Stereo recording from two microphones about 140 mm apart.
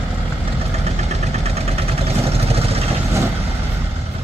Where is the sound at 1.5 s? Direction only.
45° right (ahead or behind).